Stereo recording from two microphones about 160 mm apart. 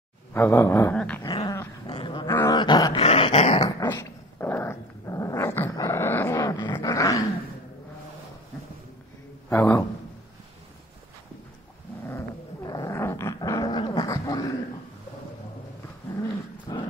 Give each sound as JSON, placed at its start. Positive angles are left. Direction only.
{"t": 0.3, "sound": "speech", "side_deg": 15}
{"t": 1.2, "sound": "dog", "side_deg": 25}
{"t": 3.9, "sound": "dog", "side_deg": 15}
{"t": 9.5, "sound": "a sound", "side_deg": 15}
{"t": 12.1, "sound": "dog", "side_deg": 20}
{"t": 16.7, "sound": "dog", "side_deg": 25}